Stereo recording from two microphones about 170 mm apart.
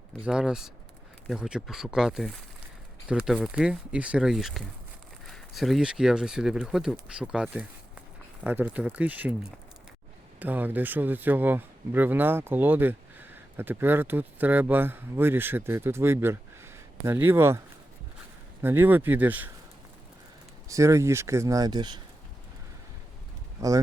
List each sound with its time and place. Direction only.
0.3 s speech: 5° right (ahead or behind)
10.4 s speech: 10° right (ahead or behind)
18.6 s speech: 15° right (ahead or behind)
20.7 s speech: 20° right (ahead or behind)
23.6 s speech: 20° right (ahead or behind)